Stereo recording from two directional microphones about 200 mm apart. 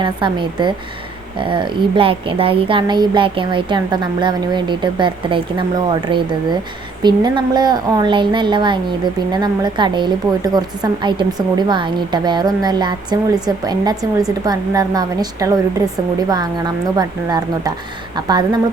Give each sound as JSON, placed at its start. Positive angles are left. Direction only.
{"t": 0.0, "sound": "speech", "side_deg": -25}